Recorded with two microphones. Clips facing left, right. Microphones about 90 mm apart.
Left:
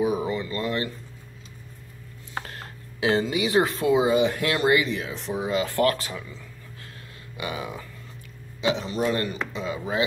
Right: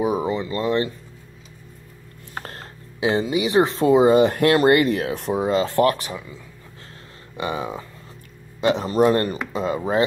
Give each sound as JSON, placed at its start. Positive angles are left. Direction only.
{"t": 0.0, "sound": "a sound", "side_deg": -25}
{"t": 2.4, "sound": "a sound", "side_deg": -35}
{"t": 3.0, "sound": "speech", "side_deg": -20}
{"t": 5.5, "sound": "speech", "side_deg": -30}
{"t": 7.3, "sound": "speech", "side_deg": -30}
{"t": 8.5, "sound": "speech", "side_deg": -45}